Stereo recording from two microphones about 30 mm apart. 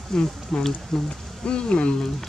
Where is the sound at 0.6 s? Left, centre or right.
Centre.